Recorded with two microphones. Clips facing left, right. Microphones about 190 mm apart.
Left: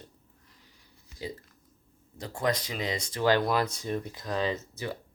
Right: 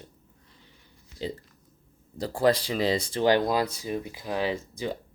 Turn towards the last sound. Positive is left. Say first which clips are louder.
# right 2 dB
turn(degrees=-15)  # may be behind; listen again after turning